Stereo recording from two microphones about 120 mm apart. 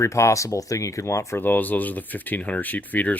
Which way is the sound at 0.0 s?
25° left (ahead or behind).